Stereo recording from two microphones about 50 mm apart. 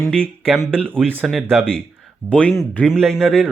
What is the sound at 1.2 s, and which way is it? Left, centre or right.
Speech, centre.